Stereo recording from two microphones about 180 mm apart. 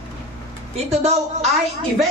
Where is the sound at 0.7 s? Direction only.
35° right (ahead or behind).